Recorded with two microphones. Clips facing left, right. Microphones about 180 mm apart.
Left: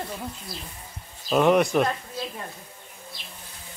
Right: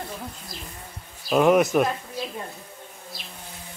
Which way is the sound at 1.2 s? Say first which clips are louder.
Right 1 dB; centre (ahead or behind).